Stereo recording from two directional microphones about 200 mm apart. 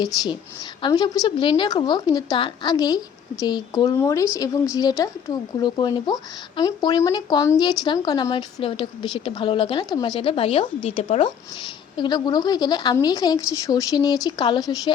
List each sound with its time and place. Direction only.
0.8 s speech: 20° left (ahead or behind)